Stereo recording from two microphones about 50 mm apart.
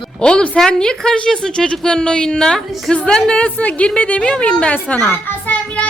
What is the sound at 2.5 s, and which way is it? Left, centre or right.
Speech, centre.